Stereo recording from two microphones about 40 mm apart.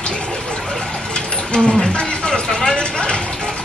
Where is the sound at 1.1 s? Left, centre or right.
Left.